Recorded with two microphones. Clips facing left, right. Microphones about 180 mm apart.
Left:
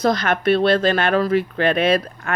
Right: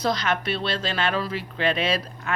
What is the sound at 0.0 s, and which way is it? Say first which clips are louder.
A woman's voice: left 6 dB; 50° left (ahead or behind).